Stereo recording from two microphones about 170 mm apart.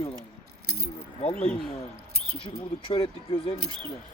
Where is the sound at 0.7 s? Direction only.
65° right (ahead or behind).